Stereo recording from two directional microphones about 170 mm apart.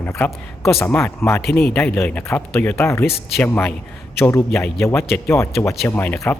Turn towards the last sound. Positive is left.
turn(degrees=10)  # may be behind; listen again after turning